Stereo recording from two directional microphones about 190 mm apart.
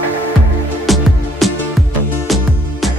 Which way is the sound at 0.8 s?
Centre (ahead or behind).